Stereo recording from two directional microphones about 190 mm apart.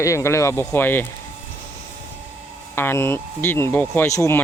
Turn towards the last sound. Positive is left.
turn(degrees=15)  # may be behind; listen again after turning